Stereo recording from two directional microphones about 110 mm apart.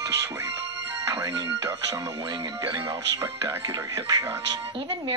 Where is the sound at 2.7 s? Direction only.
45° right (ahead or behind).